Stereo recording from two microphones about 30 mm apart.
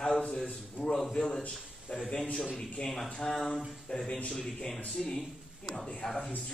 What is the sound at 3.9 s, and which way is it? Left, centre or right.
Speech, left.